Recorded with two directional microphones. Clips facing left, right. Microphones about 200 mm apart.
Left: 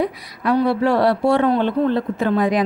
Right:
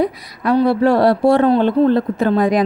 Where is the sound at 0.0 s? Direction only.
40° right (ahead or behind).